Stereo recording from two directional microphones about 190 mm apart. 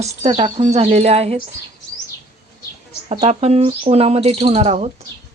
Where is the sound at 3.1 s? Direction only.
35° right (ahead or behind).